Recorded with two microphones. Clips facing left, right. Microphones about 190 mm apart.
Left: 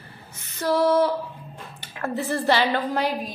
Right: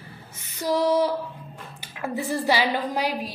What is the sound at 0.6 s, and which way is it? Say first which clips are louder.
A woman's voice: left 2 dB; 15° right (ahead or behind).